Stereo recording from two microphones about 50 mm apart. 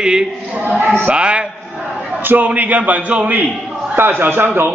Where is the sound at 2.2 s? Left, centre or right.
Right.